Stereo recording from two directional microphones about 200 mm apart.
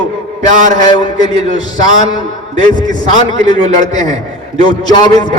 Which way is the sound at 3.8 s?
20° left (ahead or behind).